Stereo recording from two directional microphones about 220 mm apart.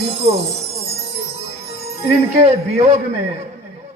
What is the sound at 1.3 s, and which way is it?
Music, 25° right (ahead or behind).